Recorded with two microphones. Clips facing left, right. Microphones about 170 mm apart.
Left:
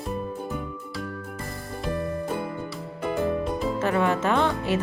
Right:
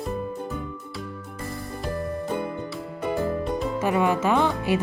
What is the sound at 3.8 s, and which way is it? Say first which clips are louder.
Music: right 1 dB; 10° right (ahead or behind).